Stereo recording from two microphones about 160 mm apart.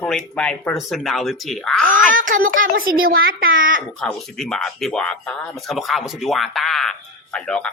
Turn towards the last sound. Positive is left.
turn(degrees=5)  # may be behind; listen again after turning